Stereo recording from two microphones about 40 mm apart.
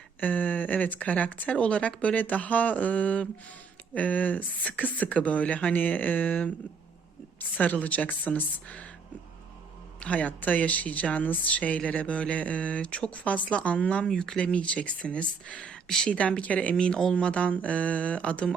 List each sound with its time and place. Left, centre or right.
0.2 s a woman's voice: left
10.0 s a woman's voice: left; by 14.3 s centre
14.3 s a woman's voice: left
15.7 s a sound: centre
16.4 s a woman's voice: left
16.7 s a woman's voice: left